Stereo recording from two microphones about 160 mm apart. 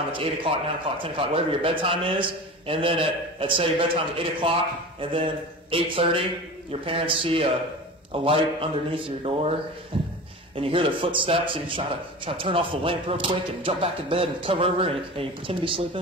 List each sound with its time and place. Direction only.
0.1 s a man's voice: 35° right (ahead or behind)
9.9 s a sound: 35° right (ahead or behind)
10.5 s a man's voice: 35° right (ahead or behind)